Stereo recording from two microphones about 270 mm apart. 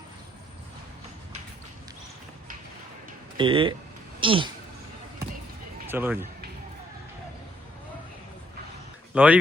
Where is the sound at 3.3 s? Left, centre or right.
Centre.